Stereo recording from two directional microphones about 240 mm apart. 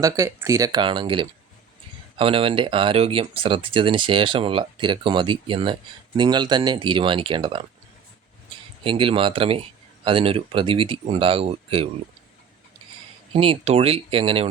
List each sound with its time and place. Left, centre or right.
0.0 s speech: centre
8.8 s speech: right
13.3 s speech: right